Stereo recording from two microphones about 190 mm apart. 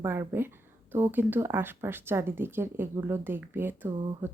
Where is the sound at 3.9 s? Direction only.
25° right (ahead or behind).